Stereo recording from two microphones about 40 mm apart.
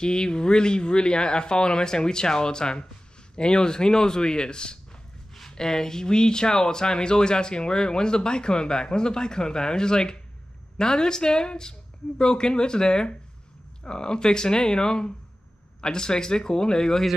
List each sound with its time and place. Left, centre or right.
0.0 s speech: left
5.3 s speech: centre